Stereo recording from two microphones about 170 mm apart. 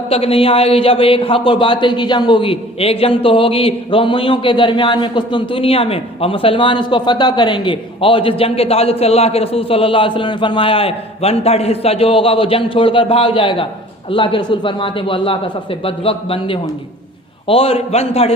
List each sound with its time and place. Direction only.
0.1 s speech: 35° left (ahead or behind)